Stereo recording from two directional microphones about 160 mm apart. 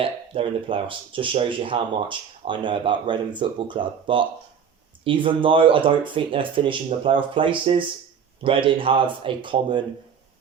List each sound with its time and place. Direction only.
0.0 s speech: 35° right (ahead or behind)